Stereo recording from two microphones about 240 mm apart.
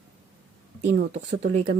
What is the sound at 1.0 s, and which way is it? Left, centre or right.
Speech, right.